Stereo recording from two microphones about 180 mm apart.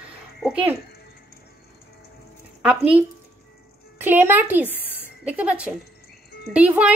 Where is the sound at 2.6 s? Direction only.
5° right (ahead or behind).